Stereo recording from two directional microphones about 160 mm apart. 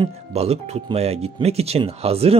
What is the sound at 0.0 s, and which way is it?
Speech, 40° right (ahead or behind).